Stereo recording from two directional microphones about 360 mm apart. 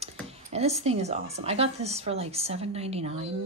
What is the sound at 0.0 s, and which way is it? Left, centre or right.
Speech, centre.